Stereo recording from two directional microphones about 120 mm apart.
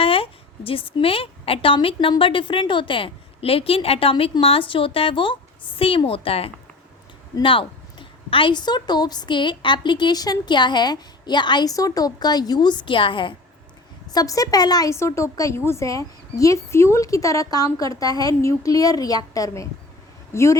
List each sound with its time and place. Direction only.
0.0 s a woman's voice: 50° left (ahead or behind)
14.1 s a woman's voice: 30° left (ahead or behind)